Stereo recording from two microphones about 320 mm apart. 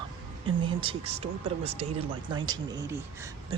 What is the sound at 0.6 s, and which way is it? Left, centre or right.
Speech, centre.